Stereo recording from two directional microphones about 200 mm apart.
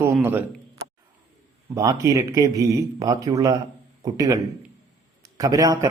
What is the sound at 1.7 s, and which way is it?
Speech, 15° right (ahead or behind).